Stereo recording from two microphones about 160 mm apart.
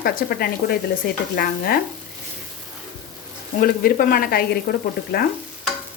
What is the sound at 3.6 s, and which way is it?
Speech, 65° left (ahead or behind).